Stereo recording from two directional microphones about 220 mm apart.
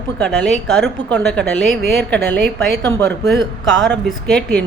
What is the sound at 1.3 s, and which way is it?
Speech, 5° left (ahead or behind).